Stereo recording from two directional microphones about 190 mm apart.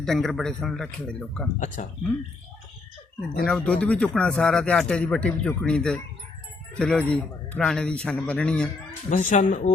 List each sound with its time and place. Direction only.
0.0 s speech: centre (ahead or behind)
1.5 s speech: 40° left (ahead or behind)
3.4 s speech: 5° left (ahead or behind)
9.0 s speech: 40° left (ahead or behind)